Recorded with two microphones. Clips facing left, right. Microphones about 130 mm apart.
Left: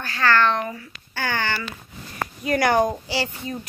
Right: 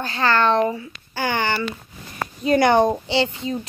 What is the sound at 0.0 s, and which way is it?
A woman's voice, 25° right (ahead or behind).